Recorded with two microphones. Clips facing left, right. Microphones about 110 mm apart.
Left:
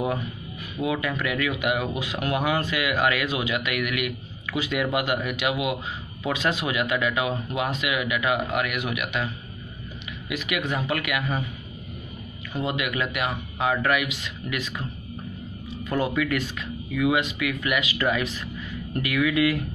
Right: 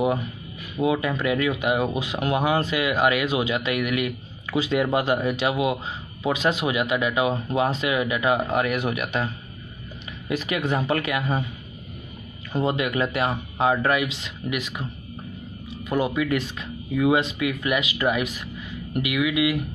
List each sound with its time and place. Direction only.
0.7 s speech: 25° right (ahead or behind)
12.5 s speech: 30° right (ahead or behind)
15.9 s speech: 20° right (ahead or behind)